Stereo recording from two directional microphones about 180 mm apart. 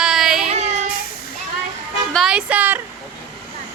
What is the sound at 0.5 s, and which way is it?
Child singing, 40° right (ahead or behind).